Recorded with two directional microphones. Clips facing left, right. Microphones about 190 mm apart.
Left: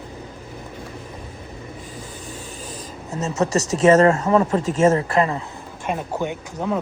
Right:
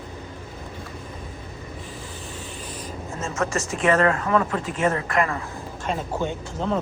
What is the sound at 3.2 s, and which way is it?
Speech, 40° left (ahead or behind).